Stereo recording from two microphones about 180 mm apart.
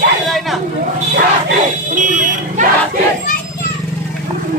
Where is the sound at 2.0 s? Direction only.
45° right (ahead or behind).